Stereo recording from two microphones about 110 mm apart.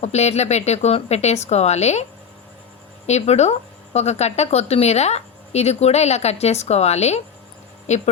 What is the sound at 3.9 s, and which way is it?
A woman's voice, 80° left.